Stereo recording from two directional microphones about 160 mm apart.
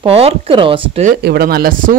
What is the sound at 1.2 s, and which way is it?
Speech, 80° right.